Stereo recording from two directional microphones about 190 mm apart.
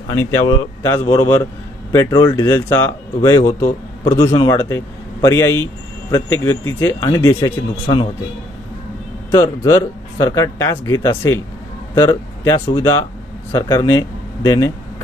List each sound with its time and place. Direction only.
0.1 s a man's voice: 15° left (ahead or behind)
7.3 s speech: 25° left (ahead or behind)
9.3 s a man's voice: 15° left (ahead or behind)